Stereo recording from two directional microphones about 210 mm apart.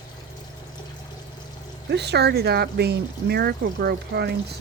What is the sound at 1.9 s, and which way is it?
Speech, 55° right (ahead or behind).